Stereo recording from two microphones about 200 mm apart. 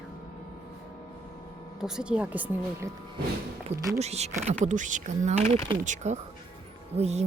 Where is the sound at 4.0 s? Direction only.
35° right (ahead or behind).